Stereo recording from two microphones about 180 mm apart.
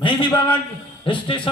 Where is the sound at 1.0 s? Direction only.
25° left (ahead or behind).